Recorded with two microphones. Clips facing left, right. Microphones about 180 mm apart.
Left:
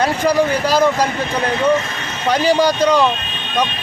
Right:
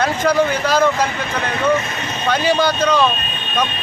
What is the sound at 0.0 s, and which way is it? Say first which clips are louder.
Speech: left 1 dB; 10° left (ahead or behind).